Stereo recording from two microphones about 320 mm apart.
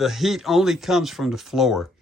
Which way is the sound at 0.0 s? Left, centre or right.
Centre.